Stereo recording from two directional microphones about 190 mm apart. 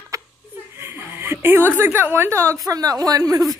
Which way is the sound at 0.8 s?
10° right (ahead or behind).